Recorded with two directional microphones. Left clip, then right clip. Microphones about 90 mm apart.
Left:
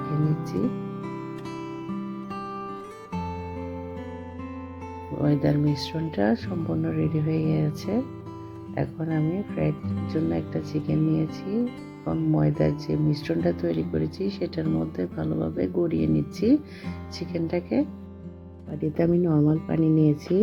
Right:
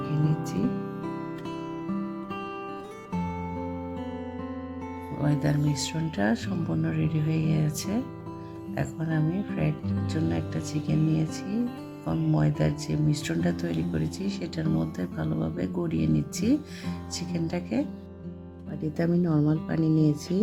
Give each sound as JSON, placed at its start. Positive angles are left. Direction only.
{"t": 0.4, "sound": "music", "side_deg": 20}
{"t": 0.7, "sound": "music", "side_deg": 5}
{"t": 5.2, "sound": "speech", "side_deg": 25}
{"t": 6.5, "sound": "speech", "side_deg": 5}
{"t": 9.0, "sound": "speech", "side_deg": 5}
{"t": 11.6, "sound": "speech", "side_deg": 5}
{"t": 12.5, "sound": "speech", "side_deg": 15}
{"t": 14.6, "sound": "speech", "side_deg": 0}
{"t": 14.9, "sound": "speech", "side_deg": 15}
{"t": 15.5, "sound": "speech", "side_deg": 15}
{"t": 19.0, "sound": "speech", "side_deg": 10}